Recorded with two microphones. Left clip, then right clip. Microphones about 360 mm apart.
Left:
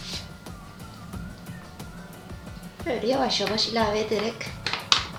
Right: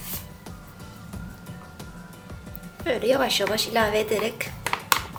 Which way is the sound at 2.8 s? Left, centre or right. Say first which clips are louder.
Right 3 dB; right.